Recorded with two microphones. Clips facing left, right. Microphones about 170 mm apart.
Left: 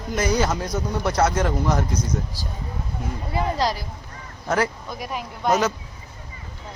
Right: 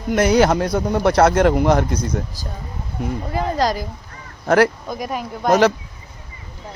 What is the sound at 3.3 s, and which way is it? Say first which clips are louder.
Speech: right 3 dB; 45° right (ahead or behind).